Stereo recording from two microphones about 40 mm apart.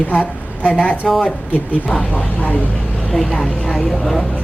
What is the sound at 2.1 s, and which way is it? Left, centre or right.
Speech, left.